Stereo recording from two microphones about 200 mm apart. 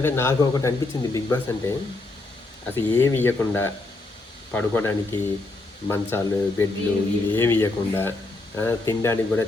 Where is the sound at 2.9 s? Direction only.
10° left (ahead or behind).